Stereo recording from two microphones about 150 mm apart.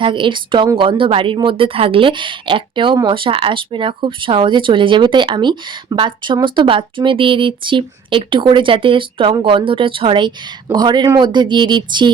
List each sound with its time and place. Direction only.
0.0 s speech: 35° right (ahead or behind)